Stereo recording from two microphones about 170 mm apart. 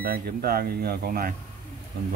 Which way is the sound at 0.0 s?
60° right (ahead or behind).